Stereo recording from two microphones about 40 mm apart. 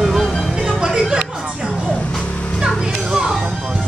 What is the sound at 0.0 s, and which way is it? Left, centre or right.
Music, centre.